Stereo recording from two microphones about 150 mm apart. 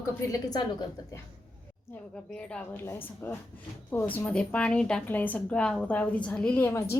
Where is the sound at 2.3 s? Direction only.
10° left (ahead or behind).